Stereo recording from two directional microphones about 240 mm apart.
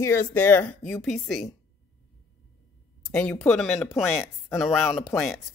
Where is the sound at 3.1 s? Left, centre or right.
Centre.